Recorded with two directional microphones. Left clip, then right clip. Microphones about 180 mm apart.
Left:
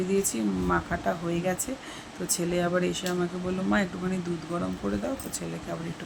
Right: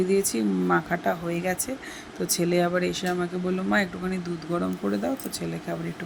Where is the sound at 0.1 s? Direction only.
20° right (ahead or behind).